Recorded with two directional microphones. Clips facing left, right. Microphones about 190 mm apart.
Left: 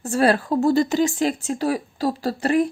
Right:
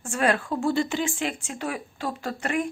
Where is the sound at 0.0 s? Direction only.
35° left (ahead or behind).